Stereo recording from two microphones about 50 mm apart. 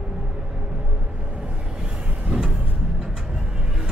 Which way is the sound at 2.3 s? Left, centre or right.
Centre.